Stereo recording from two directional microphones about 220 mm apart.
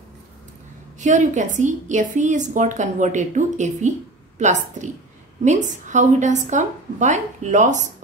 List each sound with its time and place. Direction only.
0.9 s a woman's voice: 35° right (ahead or behind)